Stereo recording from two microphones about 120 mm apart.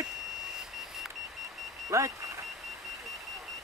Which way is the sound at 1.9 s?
25° right (ahead or behind).